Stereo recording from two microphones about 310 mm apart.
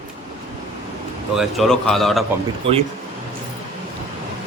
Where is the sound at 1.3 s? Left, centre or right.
Centre.